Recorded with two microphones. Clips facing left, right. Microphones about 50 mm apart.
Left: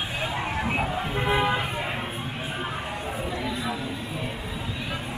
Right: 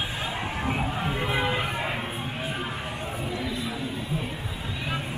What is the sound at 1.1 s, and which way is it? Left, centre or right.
Music, centre.